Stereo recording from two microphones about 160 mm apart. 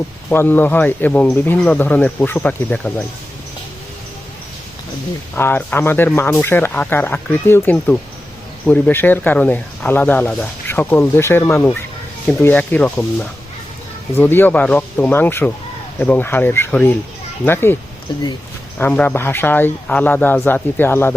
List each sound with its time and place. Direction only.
0.3 s speech: 10° left (ahead or behind)
5.3 s speech: 10° left (ahead or behind)
18.1 s speech: 30° left (ahead or behind)
18.8 s speech: 10° left (ahead or behind)